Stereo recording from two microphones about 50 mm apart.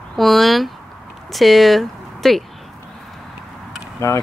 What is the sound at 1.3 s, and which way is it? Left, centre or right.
Speech, centre.